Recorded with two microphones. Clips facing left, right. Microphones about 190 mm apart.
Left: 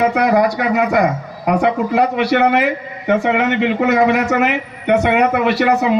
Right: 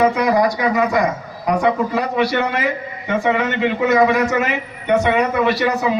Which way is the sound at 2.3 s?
60° left (ahead or behind).